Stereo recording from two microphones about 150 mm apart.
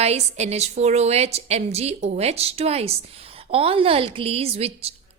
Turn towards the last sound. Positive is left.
turn(degrees=-40)  # may be behind; listen again after turning